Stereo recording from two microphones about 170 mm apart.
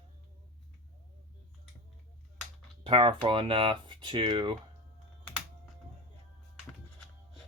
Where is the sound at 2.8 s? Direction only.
30° right (ahead or behind).